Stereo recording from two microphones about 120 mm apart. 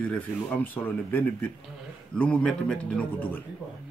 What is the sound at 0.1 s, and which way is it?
Speech, 15° left (ahead or behind).